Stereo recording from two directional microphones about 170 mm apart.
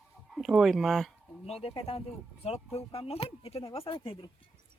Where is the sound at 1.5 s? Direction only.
35° left (ahead or behind).